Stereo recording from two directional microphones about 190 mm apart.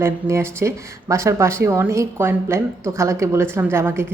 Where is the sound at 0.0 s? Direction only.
15° right (ahead or behind).